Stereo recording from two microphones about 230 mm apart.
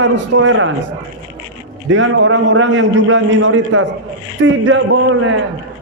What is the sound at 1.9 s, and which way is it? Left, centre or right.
A man's voice, right.